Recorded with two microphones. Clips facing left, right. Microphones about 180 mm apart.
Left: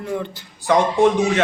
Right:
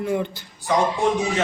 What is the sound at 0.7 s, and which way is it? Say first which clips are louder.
Speech: left 4 dB; 65° left (ahead or behind).